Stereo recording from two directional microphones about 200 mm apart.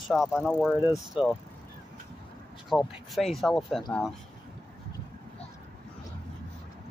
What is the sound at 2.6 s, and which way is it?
Speech, centre (ahead or behind).